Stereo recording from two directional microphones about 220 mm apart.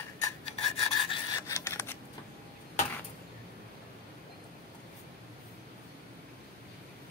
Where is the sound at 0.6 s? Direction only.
20° left (ahead or behind).